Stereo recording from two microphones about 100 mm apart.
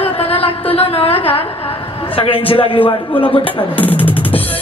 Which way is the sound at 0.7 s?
80° left.